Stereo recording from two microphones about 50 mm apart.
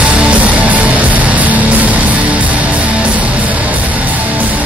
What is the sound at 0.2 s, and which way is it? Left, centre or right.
Music, right.